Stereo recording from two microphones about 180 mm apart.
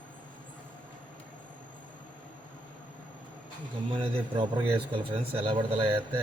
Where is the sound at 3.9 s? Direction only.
30° right (ahead or behind).